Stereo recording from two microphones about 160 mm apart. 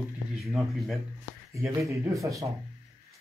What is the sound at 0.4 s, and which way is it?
Speech, centre (ahead or behind).